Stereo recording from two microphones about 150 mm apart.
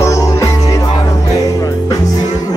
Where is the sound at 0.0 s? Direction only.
20° left (ahead or behind).